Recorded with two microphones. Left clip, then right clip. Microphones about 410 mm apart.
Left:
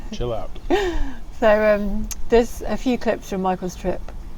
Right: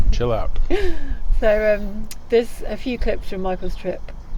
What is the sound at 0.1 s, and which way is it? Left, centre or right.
Speech, right.